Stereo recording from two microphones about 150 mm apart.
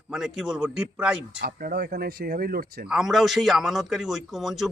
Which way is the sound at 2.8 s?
Centre (ahead or behind).